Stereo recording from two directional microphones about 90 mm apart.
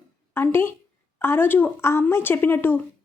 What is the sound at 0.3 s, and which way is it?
A woman's voice, 25° left (ahead or behind).